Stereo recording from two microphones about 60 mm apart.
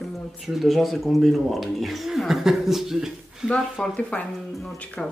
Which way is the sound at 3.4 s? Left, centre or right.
Centre.